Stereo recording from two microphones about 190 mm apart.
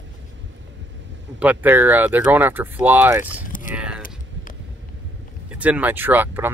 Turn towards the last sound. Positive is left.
turn(degrees=-10)  # may be behind; listen again after turning